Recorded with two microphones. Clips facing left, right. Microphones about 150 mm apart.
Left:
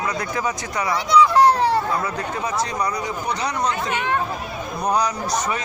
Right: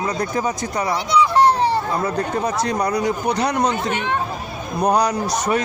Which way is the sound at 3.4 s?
60° right (ahead or behind).